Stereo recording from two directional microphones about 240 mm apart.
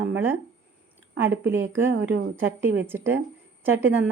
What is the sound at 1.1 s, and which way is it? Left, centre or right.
Speech, right.